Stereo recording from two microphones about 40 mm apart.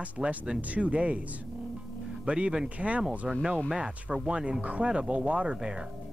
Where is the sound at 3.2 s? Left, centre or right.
Centre.